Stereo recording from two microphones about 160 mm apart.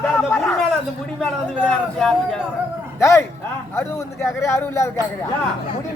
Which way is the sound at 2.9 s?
15° left (ahead or behind).